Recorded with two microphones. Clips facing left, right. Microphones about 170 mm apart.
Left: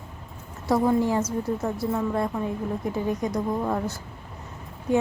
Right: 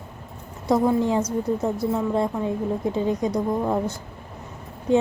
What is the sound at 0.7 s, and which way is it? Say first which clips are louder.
A woman's voice: right 2 dB; 20° right (ahead or behind).